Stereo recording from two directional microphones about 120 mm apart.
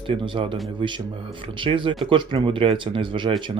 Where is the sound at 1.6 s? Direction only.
45° right (ahead or behind).